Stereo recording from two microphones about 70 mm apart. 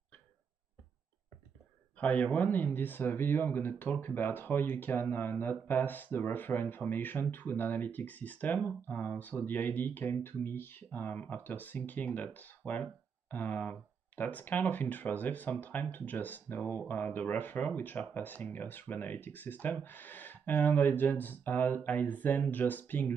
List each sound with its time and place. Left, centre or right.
2.0 s speech: left